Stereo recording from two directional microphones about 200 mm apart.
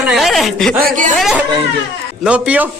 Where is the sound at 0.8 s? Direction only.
45° right (ahead or behind).